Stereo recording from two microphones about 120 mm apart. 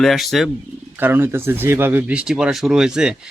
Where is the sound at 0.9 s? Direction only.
15° right (ahead or behind).